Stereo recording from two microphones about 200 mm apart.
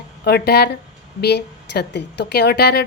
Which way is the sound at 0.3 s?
55° left (ahead or behind).